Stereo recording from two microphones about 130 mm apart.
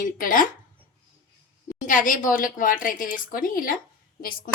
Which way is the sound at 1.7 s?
90° left.